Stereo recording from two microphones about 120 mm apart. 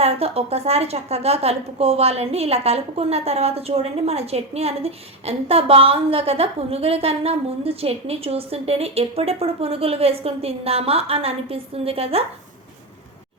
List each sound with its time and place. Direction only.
0.0 s a woman's voice: 55° right (ahead or behind)